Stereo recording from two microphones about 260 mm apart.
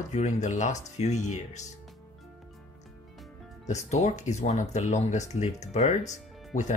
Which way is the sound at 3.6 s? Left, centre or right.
Left.